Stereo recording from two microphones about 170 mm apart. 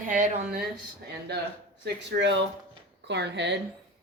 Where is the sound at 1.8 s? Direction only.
90° right.